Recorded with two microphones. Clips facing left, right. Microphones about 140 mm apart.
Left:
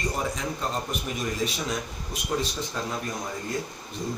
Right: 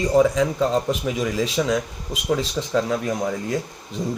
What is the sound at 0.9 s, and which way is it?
Speech, 90° right.